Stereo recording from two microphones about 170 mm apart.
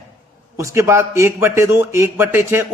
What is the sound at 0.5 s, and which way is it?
A man's voice, 15° right (ahead or behind).